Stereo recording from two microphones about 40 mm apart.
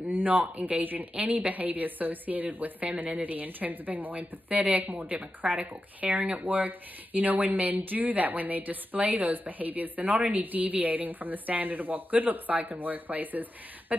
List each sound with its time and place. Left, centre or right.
0.1 s a woman's voice: right
6.4 s speech: right